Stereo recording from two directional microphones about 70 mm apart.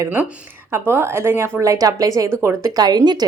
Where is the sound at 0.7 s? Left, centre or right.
Right.